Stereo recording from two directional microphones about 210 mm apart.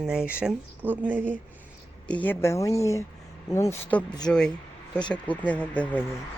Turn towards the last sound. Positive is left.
turn(degrees=5)  # may be behind; listen again after turning